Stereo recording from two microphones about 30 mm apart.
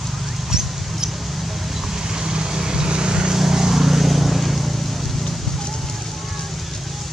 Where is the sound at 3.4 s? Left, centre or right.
Centre.